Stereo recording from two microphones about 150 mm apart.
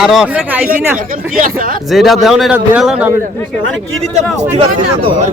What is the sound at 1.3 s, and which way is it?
Speech, 65° right (ahead or behind).